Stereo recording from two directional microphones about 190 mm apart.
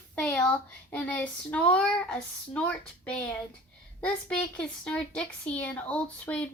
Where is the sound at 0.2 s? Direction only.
5° left (ahead or behind).